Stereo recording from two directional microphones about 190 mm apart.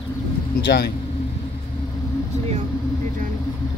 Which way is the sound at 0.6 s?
60° left (ahead or behind).